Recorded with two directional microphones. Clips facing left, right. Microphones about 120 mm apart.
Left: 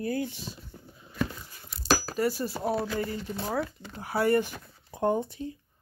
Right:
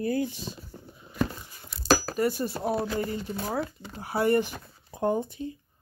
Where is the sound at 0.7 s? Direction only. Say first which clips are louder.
Right 3 dB; 30° right (ahead or behind).